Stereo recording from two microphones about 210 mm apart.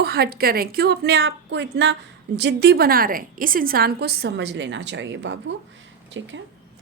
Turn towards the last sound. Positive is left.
turn(degrees=-65)  # may be behind; listen again after turning